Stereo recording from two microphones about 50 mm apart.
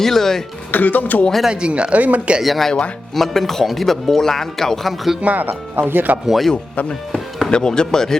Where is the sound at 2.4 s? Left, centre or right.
Centre.